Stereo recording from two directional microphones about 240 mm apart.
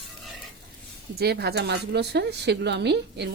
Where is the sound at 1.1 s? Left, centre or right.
Right.